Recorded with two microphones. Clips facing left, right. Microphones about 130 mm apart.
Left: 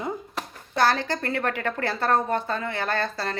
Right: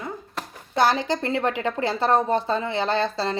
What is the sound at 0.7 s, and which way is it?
A woman's voice, 20° right (ahead or behind).